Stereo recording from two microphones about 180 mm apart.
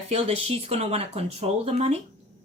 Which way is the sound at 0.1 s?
35° right (ahead or behind).